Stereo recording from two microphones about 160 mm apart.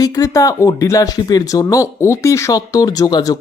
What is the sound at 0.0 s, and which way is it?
Speech, 25° left (ahead or behind).